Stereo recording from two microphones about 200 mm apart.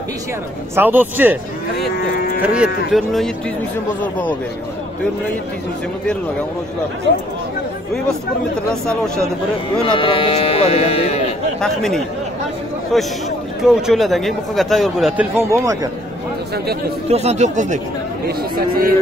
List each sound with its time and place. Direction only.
0.7 s speech: 10° right (ahead or behind)
2.4 s a man's voice: 5° right (ahead or behind)
8.8 s a man's voice: 5° left (ahead or behind)
9.8 s speech: 25° left (ahead or behind)
11.6 s a man's voice: centre (ahead or behind)
15.3 s speech: 15° right (ahead or behind)
17.1 s speech: 35° right (ahead or behind)